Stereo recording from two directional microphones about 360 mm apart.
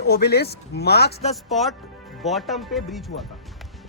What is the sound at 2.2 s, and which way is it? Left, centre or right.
Speech, centre.